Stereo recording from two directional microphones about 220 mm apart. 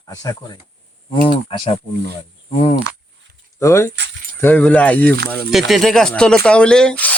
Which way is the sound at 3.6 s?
15° left (ahead or behind).